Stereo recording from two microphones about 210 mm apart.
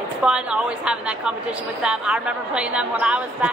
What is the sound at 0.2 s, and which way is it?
A woman's voice, 5° right (ahead or behind).